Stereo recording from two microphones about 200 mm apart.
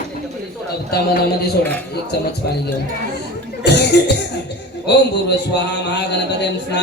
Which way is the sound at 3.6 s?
55° left (ahead or behind).